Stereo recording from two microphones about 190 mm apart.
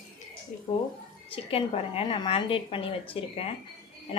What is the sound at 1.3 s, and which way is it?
A woman's voice, 30° left (ahead or behind).